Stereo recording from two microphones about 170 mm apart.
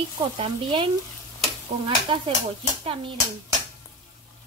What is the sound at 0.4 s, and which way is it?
Speech, 30° right (ahead or behind).